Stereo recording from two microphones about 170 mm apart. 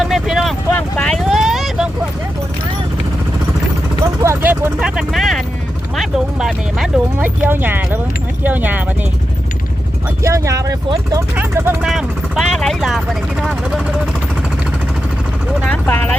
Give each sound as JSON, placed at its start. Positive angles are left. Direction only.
{"t": 0.0, "sound": "vehicle", "side_deg": 0}
{"t": 4.2, "sound": "speech", "side_deg": -15}
{"t": 10.2, "sound": "speech", "side_deg": -20}
{"t": 11.9, "sound": "speech", "side_deg": 0}
{"t": 15.7, "sound": "speech", "side_deg": 10}